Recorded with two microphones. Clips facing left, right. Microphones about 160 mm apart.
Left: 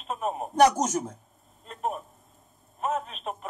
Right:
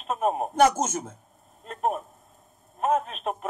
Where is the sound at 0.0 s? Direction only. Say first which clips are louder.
Right 5 dB; 55° right (ahead or behind).